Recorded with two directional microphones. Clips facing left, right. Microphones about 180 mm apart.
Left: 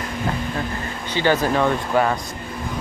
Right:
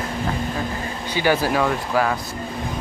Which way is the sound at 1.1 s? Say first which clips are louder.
Left 1 dB; 10° right (ahead or behind).